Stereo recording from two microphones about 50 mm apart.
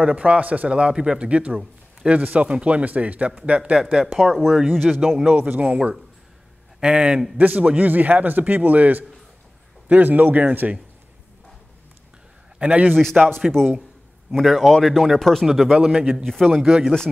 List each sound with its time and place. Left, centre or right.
0.0 s a man's voice: right
4.0 s speech: centre
5.0 s a man's voice: centre
5.3 s a man's voice: right
5.6 s a man's voice: right
7.3 s a man's voice: right
12.5 s a man's voice: right
14.3 s speech: centre
15.7 s a man's voice: centre
16.3 s speech: centre
16.6 s a man's voice: centre